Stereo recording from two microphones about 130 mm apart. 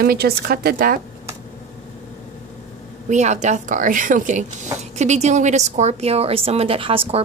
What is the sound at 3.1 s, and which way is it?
A woman's voice, 65° right (ahead or behind).